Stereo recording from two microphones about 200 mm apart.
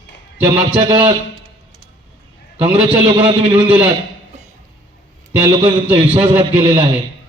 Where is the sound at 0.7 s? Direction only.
25° right (ahead or behind).